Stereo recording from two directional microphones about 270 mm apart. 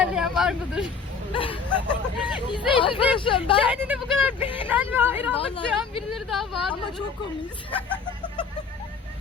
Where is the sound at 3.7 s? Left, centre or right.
Centre.